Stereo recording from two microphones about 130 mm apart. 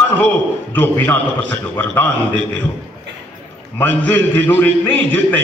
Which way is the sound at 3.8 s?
15° left (ahead or behind).